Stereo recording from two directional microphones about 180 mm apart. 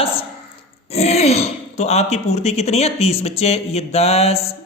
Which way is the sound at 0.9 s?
35° left (ahead or behind).